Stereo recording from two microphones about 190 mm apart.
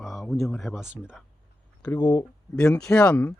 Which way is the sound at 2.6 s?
5° left (ahead or behind).